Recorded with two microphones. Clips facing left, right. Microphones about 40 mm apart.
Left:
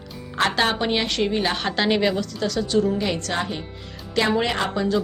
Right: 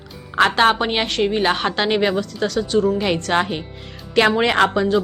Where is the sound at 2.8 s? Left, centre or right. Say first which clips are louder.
Right 4 dB; right.